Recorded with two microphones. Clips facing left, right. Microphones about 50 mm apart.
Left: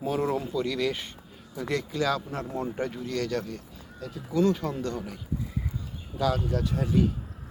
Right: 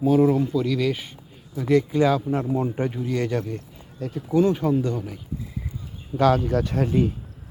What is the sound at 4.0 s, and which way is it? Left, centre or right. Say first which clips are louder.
Speech: right 8 dB; right.